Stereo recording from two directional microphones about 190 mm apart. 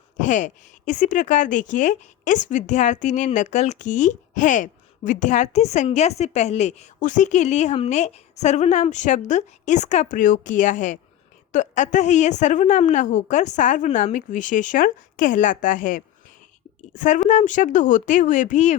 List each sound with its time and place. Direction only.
0.2 s speech: 40° left (ahead or behind)